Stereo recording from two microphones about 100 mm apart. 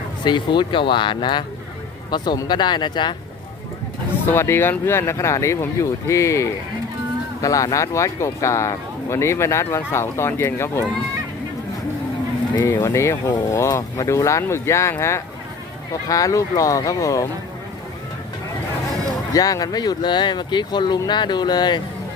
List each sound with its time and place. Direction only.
0.3 s speech: 50° left (ahead or behind)
4.3 s speech: 25° left (ahead or behind)
12.6 s speech: 30° left (ahead or behind)
19.3 s speech: 40° left (ahead or behind)